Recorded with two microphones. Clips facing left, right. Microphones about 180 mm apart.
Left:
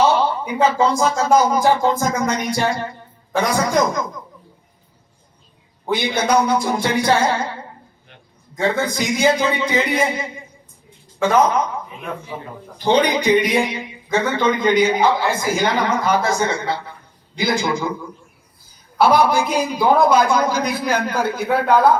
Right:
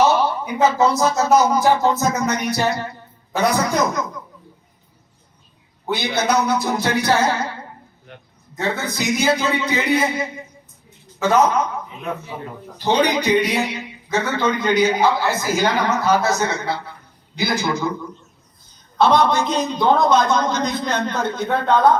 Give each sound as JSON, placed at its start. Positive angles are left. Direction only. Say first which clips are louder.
{"t": 0.4, "sound": "a man's voice", "louder": "right 1 dB", "side_deg": 10}
{"t": 6.0, "sound": "a man's voice", "louder": "left 2 dB", "side_deg": 10}
{"t": 8.6, "sound": "a man's voice", "louder": "left 3 dB", "side_deg": 10}